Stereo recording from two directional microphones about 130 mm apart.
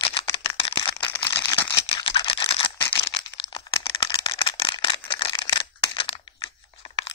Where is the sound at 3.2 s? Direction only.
35° left (ahead or behind).